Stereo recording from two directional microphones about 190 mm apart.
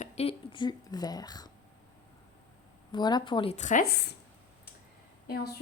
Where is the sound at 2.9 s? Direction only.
25° left (ahead or behind); by 3.8 s 40° left (ahead or behind).